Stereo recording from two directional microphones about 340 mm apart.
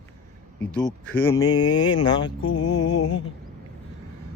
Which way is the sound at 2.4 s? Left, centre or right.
Left.